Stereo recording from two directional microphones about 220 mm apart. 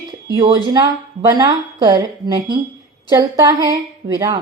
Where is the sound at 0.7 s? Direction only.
15° right (ahead or behind).